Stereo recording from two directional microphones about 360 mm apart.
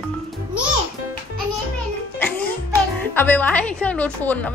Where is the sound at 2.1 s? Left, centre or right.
Centre.